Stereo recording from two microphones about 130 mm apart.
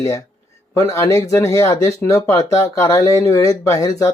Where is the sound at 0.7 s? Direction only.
25° left (ahead or behind).